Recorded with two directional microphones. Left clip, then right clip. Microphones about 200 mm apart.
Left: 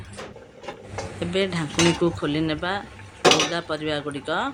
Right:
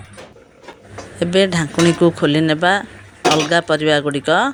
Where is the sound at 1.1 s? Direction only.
35° right (ahead or behind).